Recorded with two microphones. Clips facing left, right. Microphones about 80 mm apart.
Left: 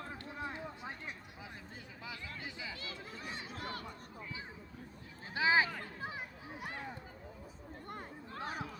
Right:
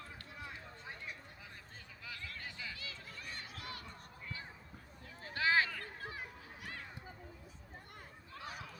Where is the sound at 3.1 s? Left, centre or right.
Left.